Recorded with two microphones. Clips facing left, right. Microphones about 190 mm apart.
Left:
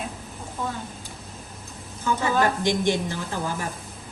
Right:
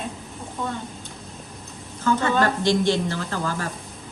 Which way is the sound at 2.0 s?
15° left (ahead or behind).